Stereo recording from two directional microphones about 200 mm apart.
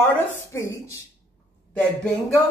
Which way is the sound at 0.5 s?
15° left (ahead or behind).